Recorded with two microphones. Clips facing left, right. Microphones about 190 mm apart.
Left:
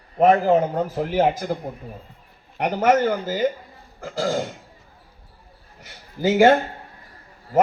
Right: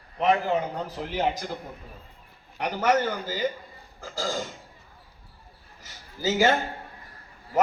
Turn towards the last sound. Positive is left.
turn(degrees=55)  # may be behind; listen again after turning